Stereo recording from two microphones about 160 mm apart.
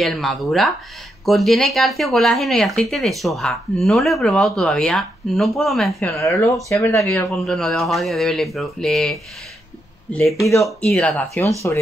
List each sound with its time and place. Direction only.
0.0 s speech: centre (ahead or behind)
5.9 s speech: 15° left (ahead or behind)
10.6 s speech: 5° left (ahead or behind)